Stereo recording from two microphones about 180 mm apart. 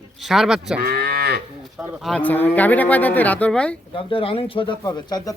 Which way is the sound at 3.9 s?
30° left (ahead or behind).